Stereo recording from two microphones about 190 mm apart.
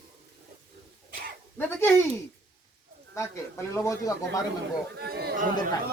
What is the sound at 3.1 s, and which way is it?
Speech, 15° left (ahead or behind).